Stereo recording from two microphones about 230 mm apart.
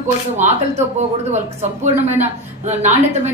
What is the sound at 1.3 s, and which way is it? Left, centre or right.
A woman's voice, right.